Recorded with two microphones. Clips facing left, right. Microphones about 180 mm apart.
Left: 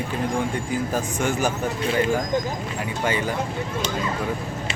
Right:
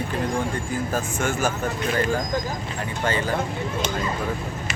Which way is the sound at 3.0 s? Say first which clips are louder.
Even; 10° left (ahead or behind).